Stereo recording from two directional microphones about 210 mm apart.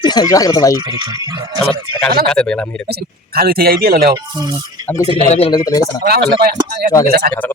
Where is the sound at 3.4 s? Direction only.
45° right (ahead or behind).